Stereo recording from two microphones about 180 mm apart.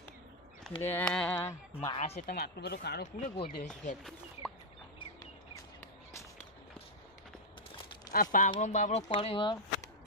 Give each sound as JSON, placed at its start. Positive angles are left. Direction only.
{"t": 0.8, "sound": "speech", "side_deg": 10}
{"t": 1.4, "sound": "speech", "side_deg": 20}
{"t": 2.0, "sound": "speech", "side_deg": 35}
{"t": 2.3, "sound": "speech", "side_deg": 65}
{"t": 3.3, "sound": "speech", "side_deg": 35}
{"t": 8.1, "sound": "speech", "side_deg": 50}